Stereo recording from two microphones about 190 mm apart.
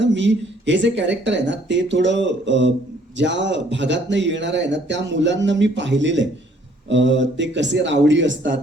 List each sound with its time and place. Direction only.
0.0 s speech: 70° right (ahead or behind)